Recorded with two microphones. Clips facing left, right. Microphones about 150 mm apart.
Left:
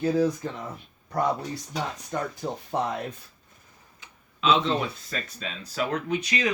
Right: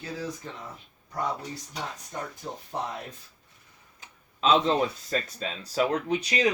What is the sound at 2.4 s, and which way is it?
Speech, 75° left (ahead or behind).